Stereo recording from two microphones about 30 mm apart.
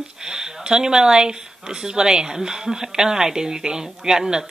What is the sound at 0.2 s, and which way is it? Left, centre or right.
A woman's voice, right.